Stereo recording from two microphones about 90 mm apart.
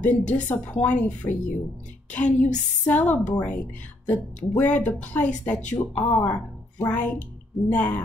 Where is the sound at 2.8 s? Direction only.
15° left (ahead or behind).